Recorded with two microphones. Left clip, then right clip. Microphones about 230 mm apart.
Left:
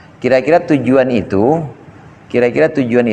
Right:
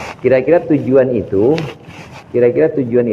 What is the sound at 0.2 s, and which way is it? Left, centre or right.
Speech, left.